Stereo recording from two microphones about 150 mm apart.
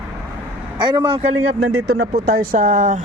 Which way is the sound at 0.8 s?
30° right (ahead or behind).